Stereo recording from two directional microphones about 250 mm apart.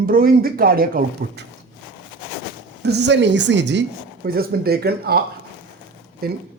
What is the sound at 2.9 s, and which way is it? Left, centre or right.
A woman's voice, right.